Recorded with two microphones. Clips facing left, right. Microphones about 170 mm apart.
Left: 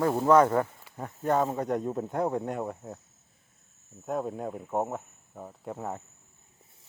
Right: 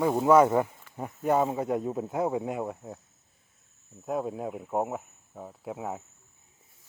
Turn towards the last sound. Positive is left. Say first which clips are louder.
# right 1 dB
turn(degrees=-5)  # may be behind; listen again after turning